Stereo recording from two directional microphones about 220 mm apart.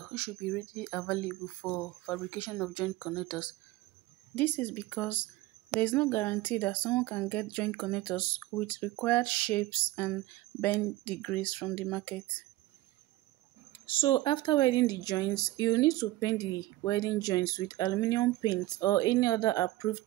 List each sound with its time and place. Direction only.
0.1 s speech: 5° left (ahead or behind)
4.4 s speech: 10° left (ahead or behind)
13.8 s speech: 20° left (ahead or behind)